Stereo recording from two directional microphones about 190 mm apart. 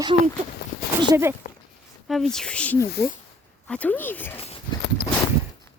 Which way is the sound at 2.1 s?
Centre (ahead or behind).